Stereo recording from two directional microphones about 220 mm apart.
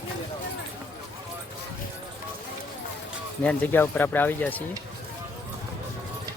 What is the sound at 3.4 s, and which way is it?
Speech, 10° left (ahead or behind).